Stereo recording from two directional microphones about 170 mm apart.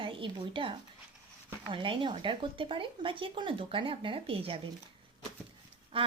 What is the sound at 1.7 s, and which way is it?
Speech, 30° right (ahead or behind).